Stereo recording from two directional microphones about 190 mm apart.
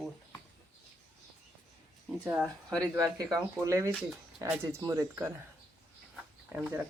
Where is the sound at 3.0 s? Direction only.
20° right (ahead or behind).